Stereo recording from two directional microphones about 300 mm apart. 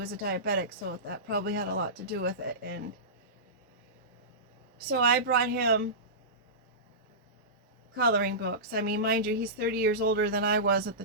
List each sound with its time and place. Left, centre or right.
0.0 s speech: right
4.9 s speech: right
7.9 s speech: right